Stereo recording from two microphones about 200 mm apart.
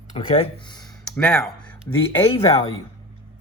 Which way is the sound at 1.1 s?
5° left (ahead or behind).